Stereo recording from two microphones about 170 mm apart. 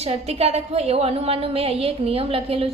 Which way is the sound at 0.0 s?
40° right (ahead or behind).